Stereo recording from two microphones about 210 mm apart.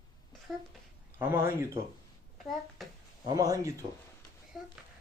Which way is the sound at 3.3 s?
15° right (ahead or behind).